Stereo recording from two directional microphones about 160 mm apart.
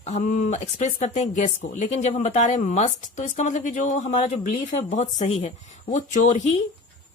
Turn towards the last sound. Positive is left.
turn(degrees=45)  # may be behind; listen again after turning